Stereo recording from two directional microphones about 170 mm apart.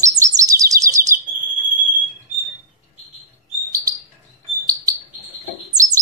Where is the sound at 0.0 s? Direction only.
20° right (ahead or behind).